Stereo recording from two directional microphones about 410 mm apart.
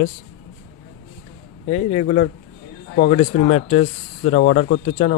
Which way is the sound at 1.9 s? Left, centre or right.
Centre.